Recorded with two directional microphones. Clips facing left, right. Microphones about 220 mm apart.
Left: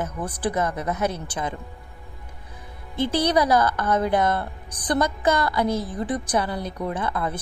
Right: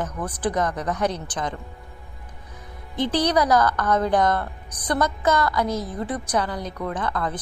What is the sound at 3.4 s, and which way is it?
Speech, 30° left (ahead or behind).